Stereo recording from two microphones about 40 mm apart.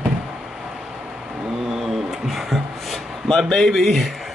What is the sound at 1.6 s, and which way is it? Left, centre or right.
Music, centre.